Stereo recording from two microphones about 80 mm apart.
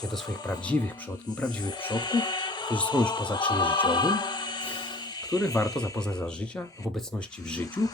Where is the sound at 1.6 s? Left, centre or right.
Left.